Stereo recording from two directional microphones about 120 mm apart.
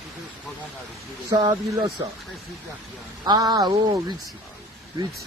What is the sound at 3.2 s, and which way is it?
Speech, 35° right (ahead or behind).